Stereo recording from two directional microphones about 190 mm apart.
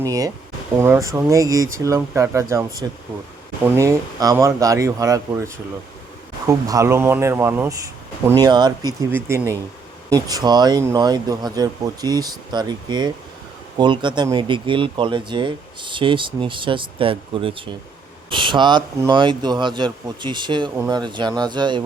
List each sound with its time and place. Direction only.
0.0 s speech: 20° right (ahead or behind)
6.5 s speech: 15° right (ahead or behind)